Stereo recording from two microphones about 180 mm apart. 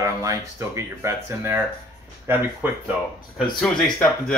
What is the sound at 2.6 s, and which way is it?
Speech, 10° right (ahead or behind).